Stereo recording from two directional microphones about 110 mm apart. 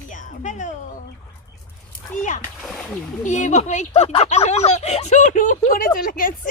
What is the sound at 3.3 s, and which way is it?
Speech, 90° left.